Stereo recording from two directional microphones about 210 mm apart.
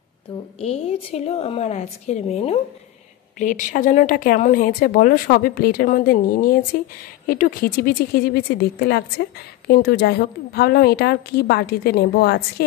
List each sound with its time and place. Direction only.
0.6 s a woman's voice: 30° left (ahead or behind); by 12.6 s 50° left (ahead or behind)